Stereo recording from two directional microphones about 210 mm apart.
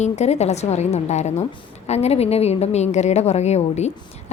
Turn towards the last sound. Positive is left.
turn(degrees=30)  # may be behind; listen again after turning